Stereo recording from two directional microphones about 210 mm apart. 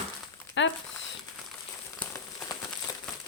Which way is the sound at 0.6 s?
60° left (ahead or behind).